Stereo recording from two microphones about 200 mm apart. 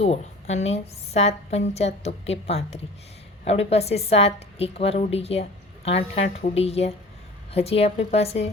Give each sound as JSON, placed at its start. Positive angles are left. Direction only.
{"t": 0.0, "sound": "a woman's voice", "side_deg": 35}